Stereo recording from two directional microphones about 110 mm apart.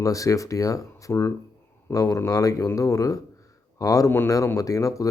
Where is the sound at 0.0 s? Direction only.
30° left (ahead or behind).